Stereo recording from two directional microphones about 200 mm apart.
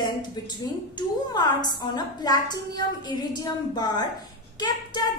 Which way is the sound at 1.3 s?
20° left (ahead or behind).